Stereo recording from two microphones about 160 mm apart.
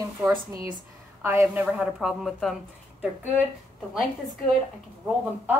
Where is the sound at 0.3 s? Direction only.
20° right (ahead or behind).